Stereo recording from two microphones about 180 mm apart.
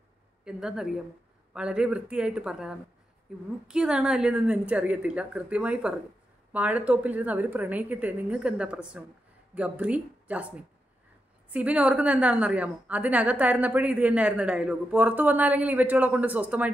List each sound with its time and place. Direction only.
0.5 s a woman's voice: 5° right (ahead or behind)